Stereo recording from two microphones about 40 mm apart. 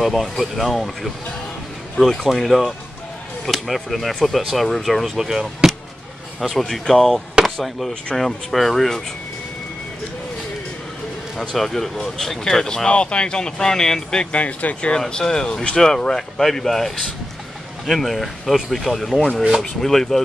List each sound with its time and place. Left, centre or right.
0.0 s speech: centre
2.2 s speech: centre
5.1 s speech: centre
6.6 s speech: centre
11.3 s speech: centre
14.3 s speech: left
14.9 s speech: left